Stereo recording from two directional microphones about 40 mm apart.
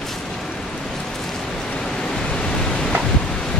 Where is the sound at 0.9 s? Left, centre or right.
Centre.